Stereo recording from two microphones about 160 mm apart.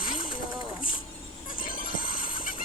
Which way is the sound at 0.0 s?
60° left (ahead or behind).